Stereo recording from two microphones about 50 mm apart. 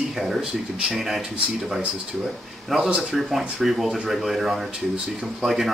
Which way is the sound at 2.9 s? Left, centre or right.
Right.